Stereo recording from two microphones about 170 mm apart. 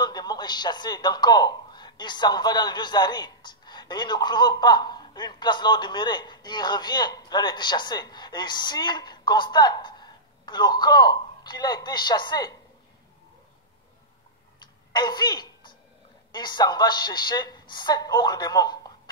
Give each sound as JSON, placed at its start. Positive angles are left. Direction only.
{"t": 0.0, "sound": "speech", "side_deg": 25}
{"t": 14.9, "sound": "a woman's voice", "side_deg": 25}